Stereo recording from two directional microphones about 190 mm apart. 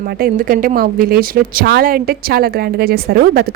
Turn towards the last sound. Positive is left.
turn(degrees=-55)  # may be behind; listen again after turning